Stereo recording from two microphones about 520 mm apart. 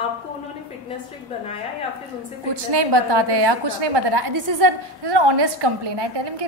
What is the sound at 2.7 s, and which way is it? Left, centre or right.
A woman's voice, right.